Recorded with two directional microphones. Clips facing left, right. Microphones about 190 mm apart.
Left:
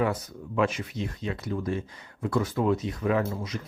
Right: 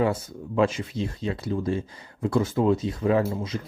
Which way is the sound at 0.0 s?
30° right (ahead or behind).